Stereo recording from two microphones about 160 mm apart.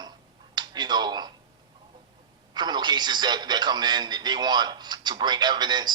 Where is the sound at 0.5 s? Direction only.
25° right (ahead or behind).